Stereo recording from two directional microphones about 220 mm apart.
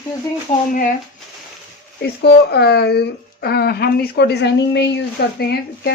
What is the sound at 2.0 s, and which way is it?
Speech, 50° left (ahead or behind).